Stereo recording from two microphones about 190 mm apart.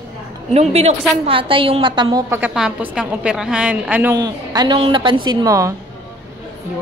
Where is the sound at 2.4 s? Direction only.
5° right (ahead or behind).